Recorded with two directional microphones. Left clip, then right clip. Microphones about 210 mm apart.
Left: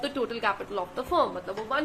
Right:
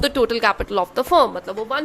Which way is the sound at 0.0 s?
60° right (ahead or behind).